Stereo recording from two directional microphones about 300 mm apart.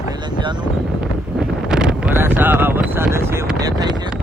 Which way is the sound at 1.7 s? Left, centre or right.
Centre.